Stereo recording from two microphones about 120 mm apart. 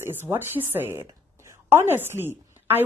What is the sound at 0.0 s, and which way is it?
Speech, 20° right (ahead or behind).